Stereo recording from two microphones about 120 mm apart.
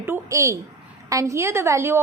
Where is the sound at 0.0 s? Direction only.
20° right (ahead or behind).